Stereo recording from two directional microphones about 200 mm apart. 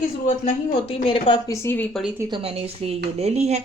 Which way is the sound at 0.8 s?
25° left (ahead or behind).